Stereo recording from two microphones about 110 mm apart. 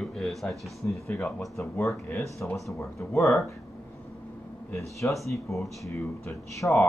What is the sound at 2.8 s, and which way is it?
Speech, 25° left (ahead or behind).